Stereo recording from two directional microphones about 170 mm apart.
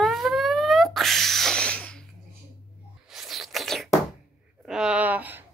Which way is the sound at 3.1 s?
Centre (ahead or behind).